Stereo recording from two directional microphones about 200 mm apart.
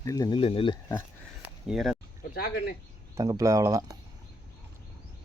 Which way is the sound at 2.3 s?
50° left (ahead or behind).